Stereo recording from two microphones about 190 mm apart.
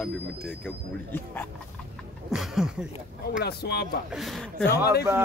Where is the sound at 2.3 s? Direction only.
Centre (ahead or behind).